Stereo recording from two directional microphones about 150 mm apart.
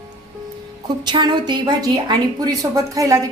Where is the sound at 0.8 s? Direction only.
30° right (ahead or behind).